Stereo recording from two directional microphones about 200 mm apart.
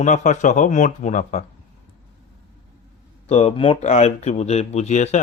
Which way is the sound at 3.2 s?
30° left (ahead or behind).